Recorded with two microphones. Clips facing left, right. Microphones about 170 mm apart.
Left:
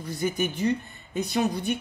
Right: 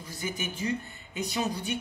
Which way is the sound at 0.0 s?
65° left (ahead or behind).